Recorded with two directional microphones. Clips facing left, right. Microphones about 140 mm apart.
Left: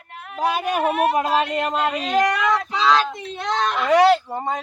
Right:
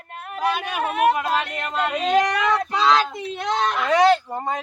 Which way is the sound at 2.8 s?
10° right (ahead or behind).